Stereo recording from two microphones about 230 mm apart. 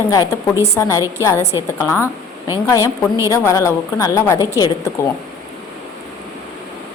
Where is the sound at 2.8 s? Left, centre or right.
Centre.